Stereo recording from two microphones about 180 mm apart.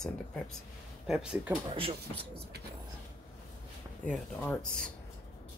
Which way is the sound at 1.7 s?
35° right (ahead or behind).